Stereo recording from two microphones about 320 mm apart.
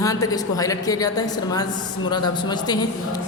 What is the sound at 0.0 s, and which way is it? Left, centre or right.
A man's voice, centre.